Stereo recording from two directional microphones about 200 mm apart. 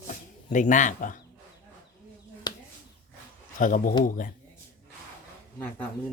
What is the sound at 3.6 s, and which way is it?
Speech, 40° left (ahead or behind).